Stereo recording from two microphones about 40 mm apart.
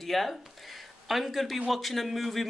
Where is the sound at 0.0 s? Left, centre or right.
Centre.